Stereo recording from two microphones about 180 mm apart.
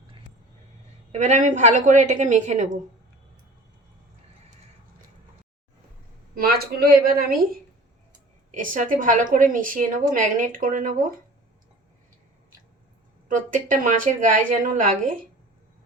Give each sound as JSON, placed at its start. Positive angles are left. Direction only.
{"t": 1.1, "sound": "a woman's voice", "side_deg": -40}
{"t": 6.3, "sound": "speech", "side_deg": -60}
{"t": 8.5, "sound": "a woman's voice", "side_deg": -45}
{"t": 13.2, "sound": "a woman's voice", "side_deg": -45}